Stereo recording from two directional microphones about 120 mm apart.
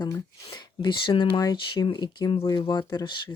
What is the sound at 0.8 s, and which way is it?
Speech, 40° left (ahead or behind).